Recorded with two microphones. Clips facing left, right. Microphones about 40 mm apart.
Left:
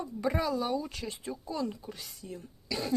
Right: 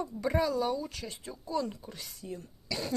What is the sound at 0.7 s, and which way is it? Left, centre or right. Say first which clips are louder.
Speech: left 2 dB; centre.